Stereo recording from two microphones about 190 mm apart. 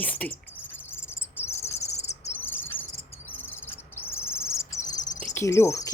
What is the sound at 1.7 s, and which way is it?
Cricket, 35° left (ahead or behind).